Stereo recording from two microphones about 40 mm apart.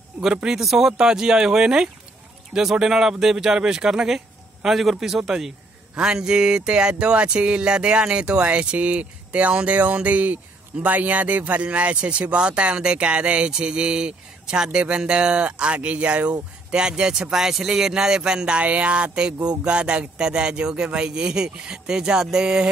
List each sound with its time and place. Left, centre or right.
0.3 s speech: right
0.6 s a man's voice: centre
18.6 s speech: right